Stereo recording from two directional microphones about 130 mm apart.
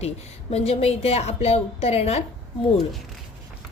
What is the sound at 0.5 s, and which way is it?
A woman's voice, 50° left (ahead or behind).